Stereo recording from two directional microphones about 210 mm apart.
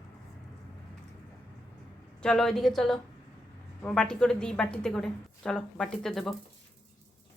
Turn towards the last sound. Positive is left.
turn(degrees=0)  # may be behind; listen again after turning